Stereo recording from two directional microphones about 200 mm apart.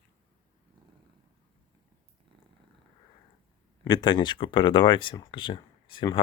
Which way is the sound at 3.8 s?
20° left (ahead or behind).